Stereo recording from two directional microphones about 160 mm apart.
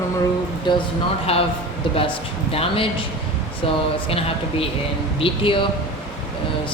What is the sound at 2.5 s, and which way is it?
Speech, 35° left (ahead or behind).